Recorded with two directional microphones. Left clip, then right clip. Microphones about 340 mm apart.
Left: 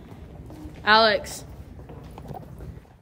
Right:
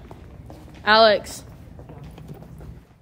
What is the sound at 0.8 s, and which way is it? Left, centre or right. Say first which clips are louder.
Speech: right 3 dB; centre.